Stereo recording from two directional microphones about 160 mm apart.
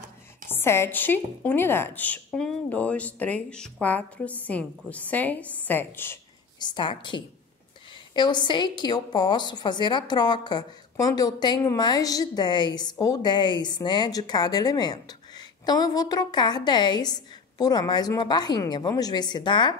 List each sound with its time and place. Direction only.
0.5 s a woman's voice: 15° left (ahead or behind)
6.6 s a woman's voice: 30° left (ahead or behind)